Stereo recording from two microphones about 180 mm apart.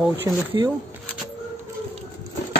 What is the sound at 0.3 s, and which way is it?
Speech, 15° right (ahead or behind).